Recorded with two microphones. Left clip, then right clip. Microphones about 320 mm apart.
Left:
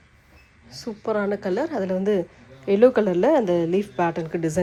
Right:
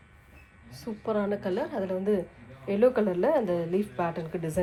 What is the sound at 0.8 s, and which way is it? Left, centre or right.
Speech, left.